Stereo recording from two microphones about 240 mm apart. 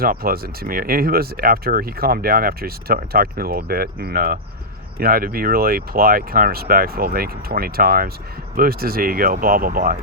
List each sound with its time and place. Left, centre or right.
0.0 s speech: right